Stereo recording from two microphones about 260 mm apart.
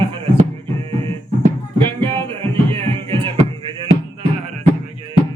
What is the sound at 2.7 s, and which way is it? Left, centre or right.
Music, centre.